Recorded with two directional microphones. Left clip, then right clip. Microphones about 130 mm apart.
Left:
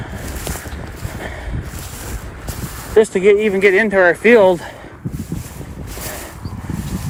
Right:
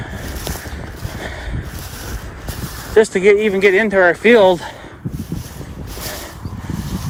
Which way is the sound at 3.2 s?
45° right (ahead or behind).